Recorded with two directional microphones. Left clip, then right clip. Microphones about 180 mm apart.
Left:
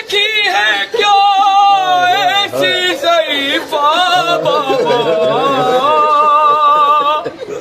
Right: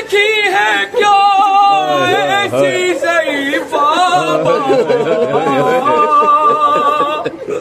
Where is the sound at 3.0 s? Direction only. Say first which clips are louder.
Left 1 dB; 20° left (ahead or behind).